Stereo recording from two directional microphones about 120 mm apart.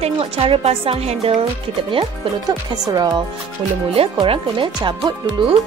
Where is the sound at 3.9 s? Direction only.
50° right (ahead or behind).